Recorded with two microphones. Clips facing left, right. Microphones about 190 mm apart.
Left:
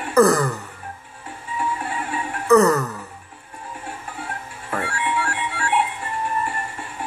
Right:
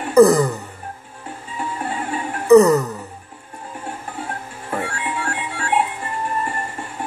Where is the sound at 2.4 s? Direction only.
15° right (ahead or behind).